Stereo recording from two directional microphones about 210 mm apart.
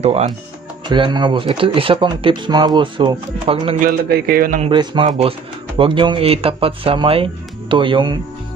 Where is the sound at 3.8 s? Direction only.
45° right (ahead or behind).